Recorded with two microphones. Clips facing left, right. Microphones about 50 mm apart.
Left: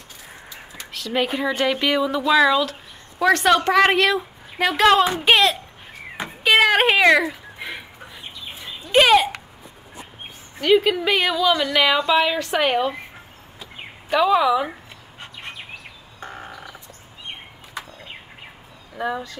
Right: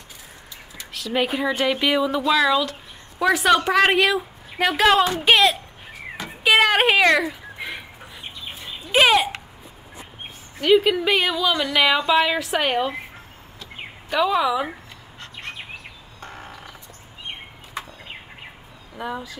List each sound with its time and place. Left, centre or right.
0.9 s a woman's voice: centre
6.4 s a sound: centre
8.9 s a sound: centre
10.6 s a woman's voice: centre
14.1 s a woman's voice: centre
16.2 s frog: left
18.9 s a woman's voice: centre